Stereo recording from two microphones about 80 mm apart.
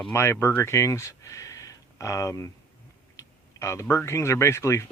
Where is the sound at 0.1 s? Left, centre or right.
Left.